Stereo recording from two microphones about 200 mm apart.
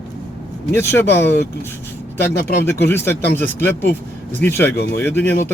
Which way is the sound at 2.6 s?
10° left (ahead or behind).